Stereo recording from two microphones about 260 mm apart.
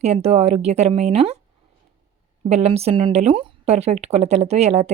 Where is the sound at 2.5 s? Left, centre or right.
Right.